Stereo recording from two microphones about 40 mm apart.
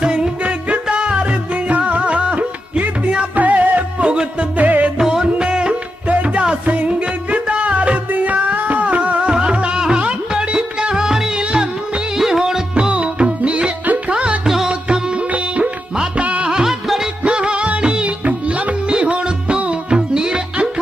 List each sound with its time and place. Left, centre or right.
0.0 s music: right
3.3 s music: right
4.0 s music: right
4.5 s music: right
4.9 s music: centre
6.1 s music: right; by 10.0 s centre
10.0 s music: right; by 12.6 s centre
12.9 s music: right
14.4 s music: centre
14.7 s music of bollywood: right
15.3 s music: right
16.6 s music of bollywood: centre
17.2 s music of bollywood: right
18.3 s music: right; by 20.4 s centre